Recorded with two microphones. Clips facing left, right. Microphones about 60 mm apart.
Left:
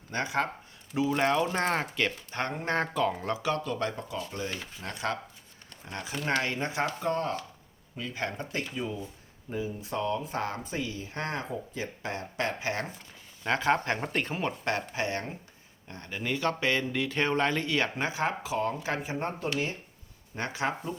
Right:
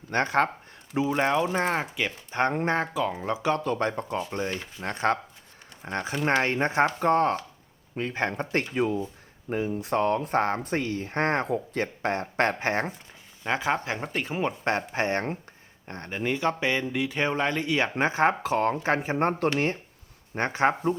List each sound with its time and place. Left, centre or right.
0.1 s speech: right
1.1 s speech: centre
3.3 s speech: right
8.7 s speech: right
10.6 s speech: right
11.4 s speech: right
13.4 s speech: centre
14.6 s speech: right
17.9 s speech: right
20.3 s speech: right